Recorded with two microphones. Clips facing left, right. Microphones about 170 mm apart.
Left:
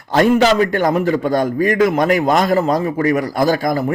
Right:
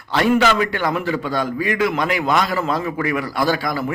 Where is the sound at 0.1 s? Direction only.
40° left (ahead or behind).